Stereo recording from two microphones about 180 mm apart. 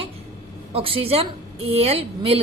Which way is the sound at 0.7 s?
30° right (ahead or behind).